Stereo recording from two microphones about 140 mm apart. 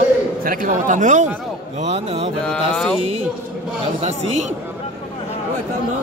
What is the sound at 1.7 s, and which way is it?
Speech, 45° right (ahead or behind).